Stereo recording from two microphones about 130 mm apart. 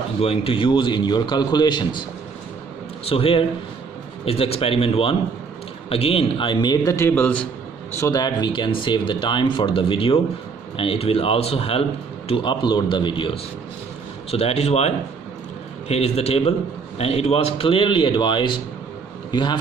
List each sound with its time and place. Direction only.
0.2 s speech: 45° left (ahead or behind)
3.1 s a man's voice: 45° left (ahead or behind); by 7.4 s 15° left (ahead or behind)
8.0 s a man's voice: 30° left (ahead or behind); by 11.8 s 45° left (ahead or behind)
12.3 s speech: 35° left (ahead or behind)
14.3 s a man's voice: 50° left (ahead or behind); by 19.6 s 35° left (ahead or behind)